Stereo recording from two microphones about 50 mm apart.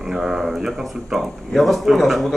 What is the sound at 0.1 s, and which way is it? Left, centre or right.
A man's voice, centre.